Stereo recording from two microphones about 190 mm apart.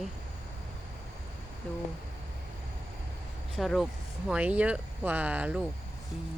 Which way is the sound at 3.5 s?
Centre (ahead or behind).